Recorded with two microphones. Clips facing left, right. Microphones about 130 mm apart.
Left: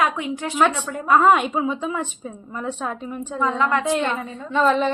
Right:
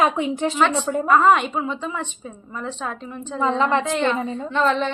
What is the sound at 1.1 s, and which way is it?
A woman's voice, 5° left (ahead or behind).